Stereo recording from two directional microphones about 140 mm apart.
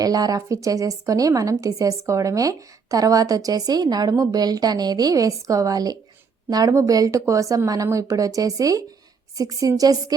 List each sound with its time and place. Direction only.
0.0 s a woman's voice: 25° right (ahead or behind)